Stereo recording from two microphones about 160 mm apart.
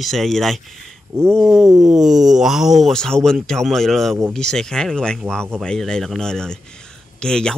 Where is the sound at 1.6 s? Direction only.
20° right (ahead or behind).